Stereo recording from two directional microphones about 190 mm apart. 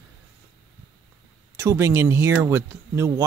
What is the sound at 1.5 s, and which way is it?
Speech, 15° right (ahead or behind).